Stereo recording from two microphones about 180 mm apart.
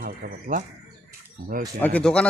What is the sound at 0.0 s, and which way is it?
Speech, 50° right (ahead or behind).